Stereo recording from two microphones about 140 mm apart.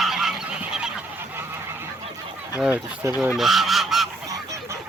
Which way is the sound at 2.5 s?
15° right (ahead or behind).